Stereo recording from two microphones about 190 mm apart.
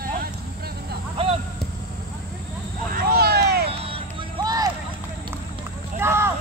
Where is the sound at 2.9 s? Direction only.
50° right (ahead or behind).